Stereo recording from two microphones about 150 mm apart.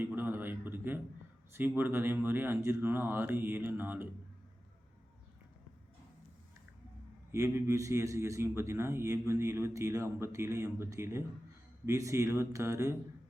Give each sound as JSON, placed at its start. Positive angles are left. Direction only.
{"t": 0.0, "sound": "a sound", "side_deg": -15}
{"t": 1.5, "sound": "speech", "side_deg": -10}
{"t": 7.3, "sound": "a man's voice", "side_deg": -20}